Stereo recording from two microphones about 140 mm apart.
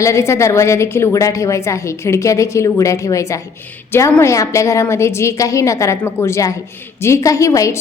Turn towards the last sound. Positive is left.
turn(degrees=20)  # may be behind; listen again after turning